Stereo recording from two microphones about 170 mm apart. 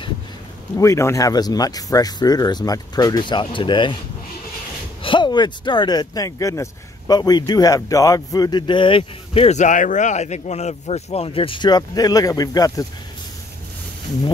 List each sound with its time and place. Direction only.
0.7 s speech: 15° left (ahead or behind)
5.0 s speech: 25° left (ahead or behind)